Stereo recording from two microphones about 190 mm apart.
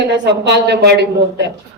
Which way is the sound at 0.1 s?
65° right (ahead or behind).